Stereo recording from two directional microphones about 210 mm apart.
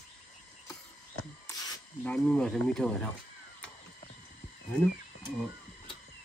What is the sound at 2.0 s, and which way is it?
Speech, 5° left (ahead or behind).